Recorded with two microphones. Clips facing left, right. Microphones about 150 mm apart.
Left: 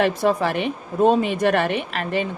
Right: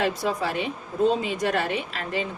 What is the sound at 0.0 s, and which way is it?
Speech, 65° left (ahead or behind).